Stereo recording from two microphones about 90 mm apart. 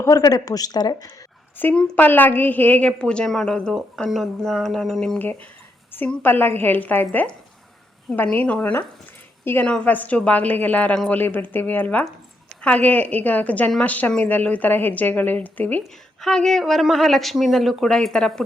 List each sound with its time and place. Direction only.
0.0 s speech: 40° left (ahead or behind)
1.7 s a woman's voice: 10° left (ahead or behind)
2.0 s a woman's voice: 20° left (ahead or behind)
6.2 s a woman's voice: 20° left (ahead or behind)
15.8 s a woman's voice: 5° left (ahead or behind)